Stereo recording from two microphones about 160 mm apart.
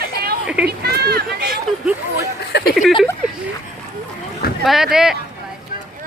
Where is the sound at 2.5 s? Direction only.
90° left.